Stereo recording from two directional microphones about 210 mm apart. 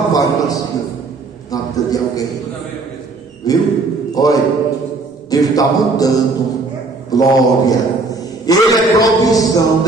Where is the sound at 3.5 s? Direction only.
15° left (ahead or behind).